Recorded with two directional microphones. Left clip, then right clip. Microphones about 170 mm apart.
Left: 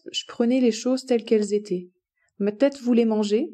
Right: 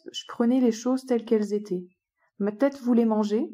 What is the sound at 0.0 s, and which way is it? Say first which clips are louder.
A woman's voice: left 3 dB; 20° left (ahead or behind).